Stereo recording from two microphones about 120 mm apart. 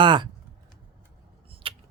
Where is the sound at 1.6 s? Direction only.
50° right (ahead or behind).